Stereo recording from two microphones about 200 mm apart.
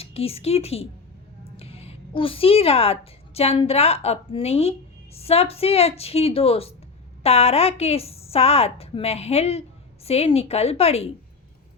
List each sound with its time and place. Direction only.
0.0 s a woman's voice: 30° left (ahead or behind)